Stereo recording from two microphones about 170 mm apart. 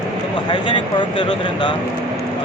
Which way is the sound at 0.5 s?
30° left (ahead or behind).